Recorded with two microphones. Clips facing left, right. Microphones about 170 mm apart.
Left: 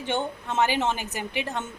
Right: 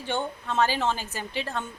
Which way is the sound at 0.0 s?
20° left (ahead or behind).